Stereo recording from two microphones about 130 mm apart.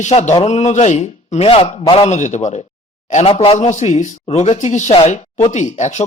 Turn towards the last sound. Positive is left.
turn(degrees=65)  # may be behind; listen again after turning